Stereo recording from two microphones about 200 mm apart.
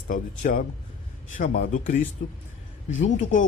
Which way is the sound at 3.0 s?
40° left (ahead or behind).